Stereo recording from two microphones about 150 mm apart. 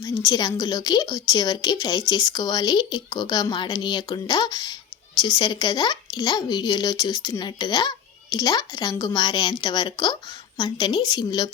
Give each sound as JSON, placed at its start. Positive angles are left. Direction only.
{"t": 0.0, "sound": "a woman's voice", "side_deg": 25}